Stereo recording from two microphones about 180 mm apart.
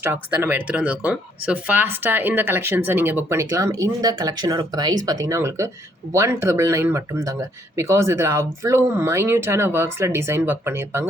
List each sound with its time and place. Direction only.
0.0 s speech: 10° right (ahead or behind)